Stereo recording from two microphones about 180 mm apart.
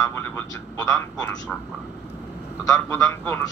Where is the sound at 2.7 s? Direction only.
15° left (ahead or behind).